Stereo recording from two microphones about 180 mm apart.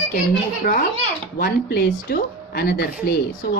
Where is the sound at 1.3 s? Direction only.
60° left (ahead or behind).